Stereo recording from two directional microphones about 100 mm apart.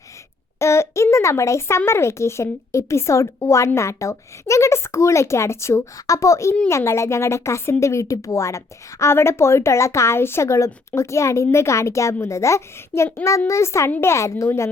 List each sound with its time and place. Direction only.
0.6 s speech: 30° left (ahead or behind)